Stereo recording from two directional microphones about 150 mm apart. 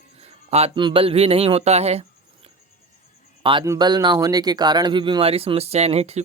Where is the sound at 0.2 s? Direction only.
40° right (ahead or behind).